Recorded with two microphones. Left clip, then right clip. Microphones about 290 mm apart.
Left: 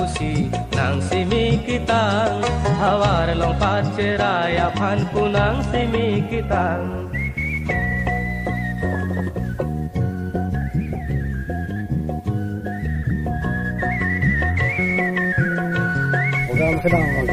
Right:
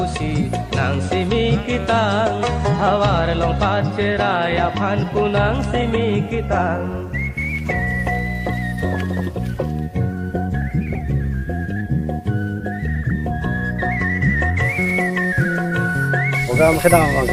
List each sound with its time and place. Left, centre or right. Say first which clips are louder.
0.0 s music: right 1 dB; centre; by 8.2 s right
13.8 s music: right 1 dB; right